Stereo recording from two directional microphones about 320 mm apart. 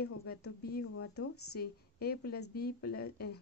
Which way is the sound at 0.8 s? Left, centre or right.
Left.